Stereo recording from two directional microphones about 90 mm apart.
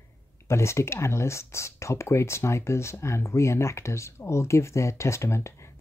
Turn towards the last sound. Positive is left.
turn(degrees=30)  # may be behind; listen again after turning